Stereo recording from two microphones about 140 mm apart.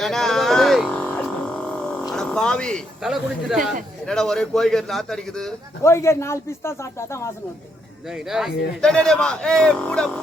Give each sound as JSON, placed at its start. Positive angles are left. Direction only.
{"t": 0.0, "sound": "a sound", "side_deg": 0}
{"t": 4.0, "sound": "a man's voice", "side_deg": 5}
{"t": 5.8, "sound": "speech", "side_deg": 20}
{"t": 8.1, "sound": "a man's voice", "side_deg": -5}